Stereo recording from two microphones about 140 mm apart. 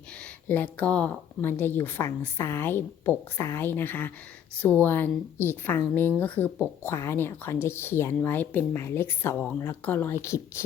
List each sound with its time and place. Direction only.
0.2 s a woman's voice: 15° left (ahead or behind)